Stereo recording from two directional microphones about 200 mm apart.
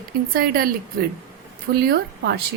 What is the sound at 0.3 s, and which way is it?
A woman's voice, 50° right (ahead or behind).